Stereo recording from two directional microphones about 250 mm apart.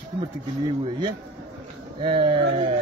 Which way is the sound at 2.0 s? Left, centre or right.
Centre.